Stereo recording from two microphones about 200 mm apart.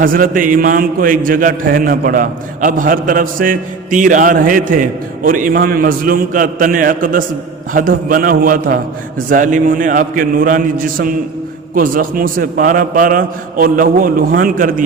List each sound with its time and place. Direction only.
0.0 s a man's voice: 45° right (ahead or behind)